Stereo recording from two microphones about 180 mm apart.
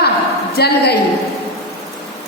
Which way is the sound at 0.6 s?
65° left (ahead or behind).